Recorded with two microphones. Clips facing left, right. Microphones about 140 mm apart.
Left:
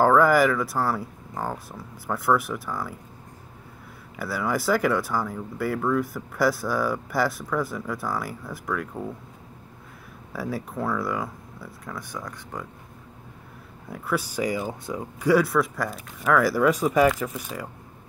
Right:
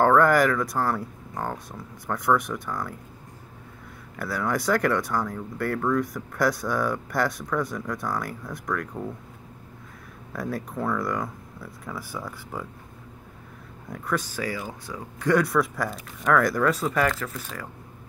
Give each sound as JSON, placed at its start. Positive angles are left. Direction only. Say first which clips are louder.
{"t": 0.0, "sound": "speech", "louder": "left 1 dB", "side_deg": 5}
{"t": 4.2, "sound": "speech", "louder": "even", "side_deg": 5}
{"t": 10.3, "sound": "speech", "louder": "even", "side_deg": 5}
{"t": 13.8, "sound": "speech", "louder": "left 1 dB", "side_deg": 5}
{"t": 15.1, "sound": "speech", "louder": "left 1 dB", "side_deg": 5}